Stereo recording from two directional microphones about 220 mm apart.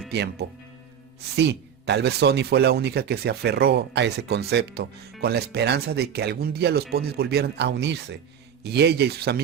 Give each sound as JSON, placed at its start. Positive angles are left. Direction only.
{"t": 0.1, "sound": "speech", "side_deg": -50}